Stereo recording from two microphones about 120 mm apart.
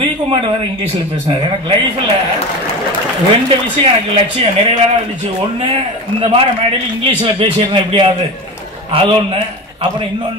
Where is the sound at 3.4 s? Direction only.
45° right (ahead or behind).